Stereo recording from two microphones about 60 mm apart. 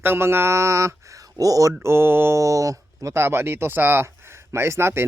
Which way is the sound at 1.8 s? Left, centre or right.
Right.